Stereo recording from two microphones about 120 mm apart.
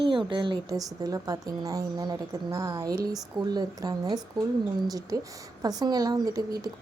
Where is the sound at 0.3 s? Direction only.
40° right (ahead or behind).